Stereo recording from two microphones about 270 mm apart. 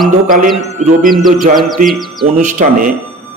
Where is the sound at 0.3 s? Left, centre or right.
Right.